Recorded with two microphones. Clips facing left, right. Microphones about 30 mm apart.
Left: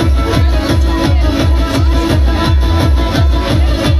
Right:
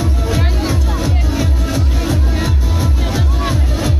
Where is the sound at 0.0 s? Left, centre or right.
Left.